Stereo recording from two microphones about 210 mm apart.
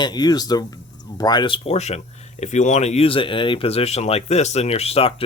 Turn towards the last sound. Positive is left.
turn(degrees=30)  # may be behind; listen again after turning